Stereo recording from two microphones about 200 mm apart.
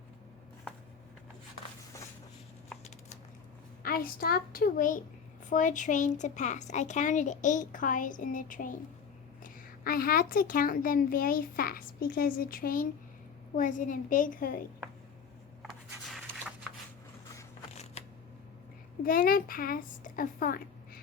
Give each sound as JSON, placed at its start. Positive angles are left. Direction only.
{"t": 3.8, "sound": "a child's voice", "side_deg": 45}
{"t": 18.0, "sound": "shuffling cards", "side_deg": 35}
{"t": 19.0, "sound": "a child's voice", "side_deg": 45}